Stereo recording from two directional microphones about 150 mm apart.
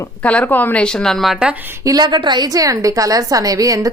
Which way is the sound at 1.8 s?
25° right (ahead or behind).